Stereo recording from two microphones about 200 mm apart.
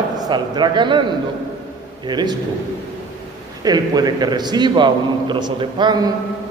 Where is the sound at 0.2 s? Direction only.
20° right (ahead or behind).